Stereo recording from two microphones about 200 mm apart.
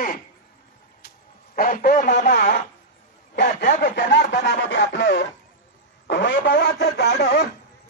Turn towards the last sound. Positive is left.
turn(degrees=55)  # may be behind; listen again after turning